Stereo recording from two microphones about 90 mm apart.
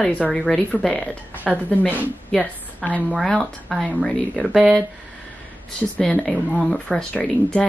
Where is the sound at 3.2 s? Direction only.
5° left (ahead or behind).